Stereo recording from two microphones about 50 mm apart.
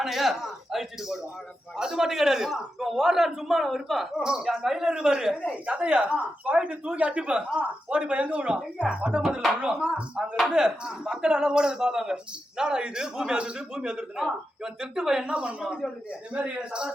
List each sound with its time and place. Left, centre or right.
0.0 s a man's voice: centre; by 9.2 s right
9.9 s speech: centre
15.3 s a man's voice: right